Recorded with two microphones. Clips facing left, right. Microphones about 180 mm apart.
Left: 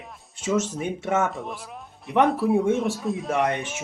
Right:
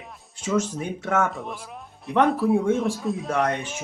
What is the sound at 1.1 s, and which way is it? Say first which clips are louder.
Speech: right 1 dB; 5° left (ahead or behind).